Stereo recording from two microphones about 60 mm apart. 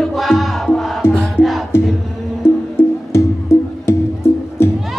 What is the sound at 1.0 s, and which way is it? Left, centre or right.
Music, left.